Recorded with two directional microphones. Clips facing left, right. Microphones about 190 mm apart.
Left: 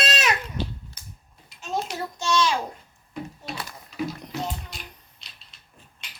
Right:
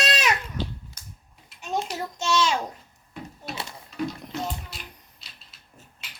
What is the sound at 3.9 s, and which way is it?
Mechanisms, 5° left (ahead or behind).